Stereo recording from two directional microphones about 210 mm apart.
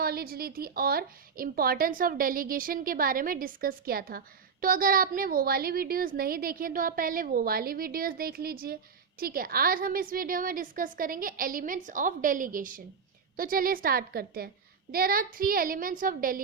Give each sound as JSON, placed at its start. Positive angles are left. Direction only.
{"t": 0.0, "sound": "a woman's voice", "side_deg": -45}